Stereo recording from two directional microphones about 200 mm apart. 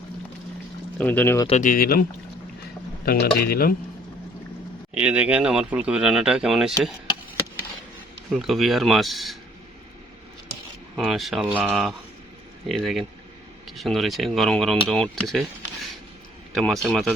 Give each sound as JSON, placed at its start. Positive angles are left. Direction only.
{"t": 0.9, "sound": "speech", "side_deg": 10}
{"t": 1.5, "sound": "speech", "side_deg": 35}
{"t": 3.1, "sound": "speech", "side_deg": 50}
{"t": 4.9, "sound": "speech", "side_deg": -5}
{"t": 8.3, "sound": "speech", "side_deg": 0}
{"t": 10.9, "sound": "speech", "side_deg": 0}
{"t": 16.6, "sound": "speech", "side_deg": 0}